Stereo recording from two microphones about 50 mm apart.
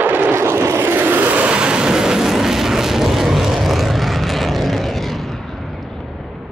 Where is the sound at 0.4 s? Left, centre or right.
Right.